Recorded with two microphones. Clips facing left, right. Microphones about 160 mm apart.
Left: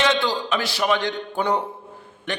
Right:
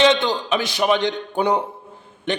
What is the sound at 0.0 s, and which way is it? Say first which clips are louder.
A man's voice: right 4 dB; 20° right (ahead or behind).